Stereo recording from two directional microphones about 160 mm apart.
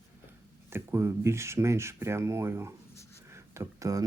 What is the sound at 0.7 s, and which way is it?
Speech, 15° right (ahead or behind).